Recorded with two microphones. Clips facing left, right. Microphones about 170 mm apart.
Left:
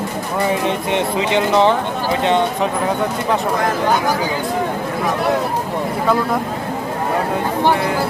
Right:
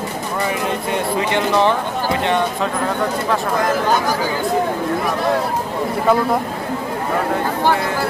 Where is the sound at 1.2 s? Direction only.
20° left (ahead or behind).